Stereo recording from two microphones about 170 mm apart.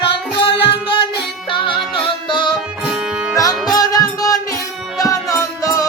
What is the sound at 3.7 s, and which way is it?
Music, 20° left (ahead or behind).